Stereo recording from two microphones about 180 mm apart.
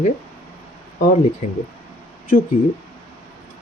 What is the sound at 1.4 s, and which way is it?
Speech, 45° left (ahead or behind).